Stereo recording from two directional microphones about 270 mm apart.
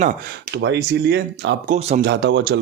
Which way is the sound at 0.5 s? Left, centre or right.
Right.